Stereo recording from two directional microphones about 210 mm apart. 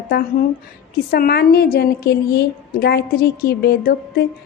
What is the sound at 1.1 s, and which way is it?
A woman's voice, 50° left (ahead or behind).